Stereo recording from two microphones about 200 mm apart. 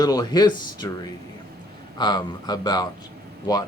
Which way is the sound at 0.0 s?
20° left (ahead or behind).